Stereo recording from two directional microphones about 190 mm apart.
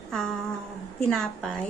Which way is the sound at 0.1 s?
5° left (ahead or behind).